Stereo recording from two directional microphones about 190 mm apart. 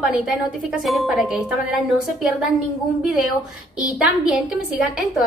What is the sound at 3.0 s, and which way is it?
Speech, centre (ahead or behind).